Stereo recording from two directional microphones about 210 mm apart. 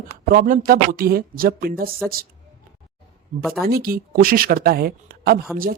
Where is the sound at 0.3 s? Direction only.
40° right (ahead or behind).